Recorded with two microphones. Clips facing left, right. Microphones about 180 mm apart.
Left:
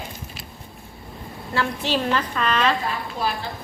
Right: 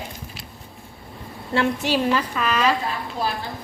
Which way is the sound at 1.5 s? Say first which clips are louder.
Right 4 dB; 20° right (ahead or behind).